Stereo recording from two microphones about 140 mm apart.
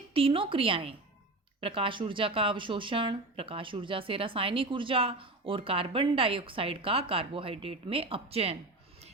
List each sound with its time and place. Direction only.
0.1 s speech: 40° right (ahead or behind)